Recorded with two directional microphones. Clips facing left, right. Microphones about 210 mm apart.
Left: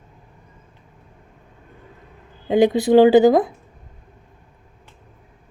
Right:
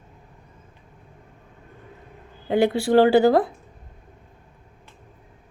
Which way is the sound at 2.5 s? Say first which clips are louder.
Left 4 dB; 20° left (ahead or behind).